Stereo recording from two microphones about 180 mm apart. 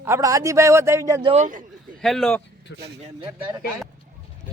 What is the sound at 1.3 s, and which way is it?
Speech, 45° right (ahead or behind).